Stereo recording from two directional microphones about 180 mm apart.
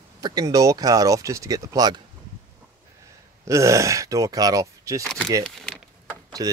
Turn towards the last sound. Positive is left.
turn(degrees=-20)  # may be behind; listen again after turning